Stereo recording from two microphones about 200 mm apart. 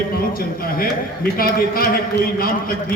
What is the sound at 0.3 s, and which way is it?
A man's voice, 45° left (ahead or behind).